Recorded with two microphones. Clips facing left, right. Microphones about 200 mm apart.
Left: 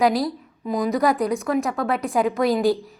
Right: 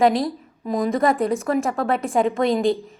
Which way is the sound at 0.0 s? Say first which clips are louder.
Right 2 dB; centre (ahead or behind).